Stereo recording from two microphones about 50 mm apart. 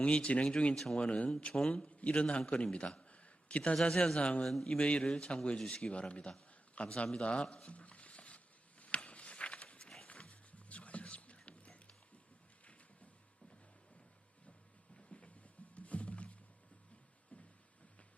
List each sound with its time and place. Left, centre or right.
0.0 s a man's voice: left
4.4 s speech: centre
4.8 s a man's voice: left
7.5 s a sound: left
10.1 s music: left
14.9 s a sound: left
15.7 s wild animals: left